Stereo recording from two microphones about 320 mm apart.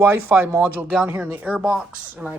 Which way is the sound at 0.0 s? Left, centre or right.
Centre.